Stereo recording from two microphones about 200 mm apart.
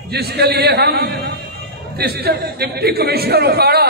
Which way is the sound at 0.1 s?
55° right (ahead or behind).